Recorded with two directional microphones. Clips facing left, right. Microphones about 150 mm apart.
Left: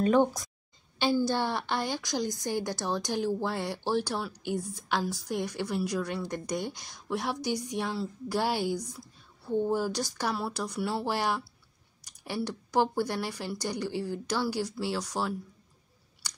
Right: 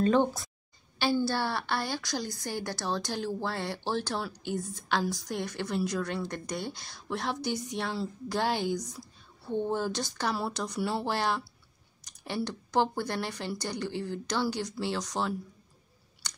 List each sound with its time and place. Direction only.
0.0 s a woman's voice: 10° left (ahead or behind)
12.0 s a sound: 10° left (ahead or behind)
12.4 s a woman's voice: 10° left (ahead or behind)
16.2 s chewing: 10° left (ahead or behind)